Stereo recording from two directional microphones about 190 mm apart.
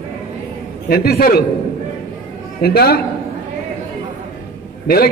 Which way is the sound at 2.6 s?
55° left (ahead or behind).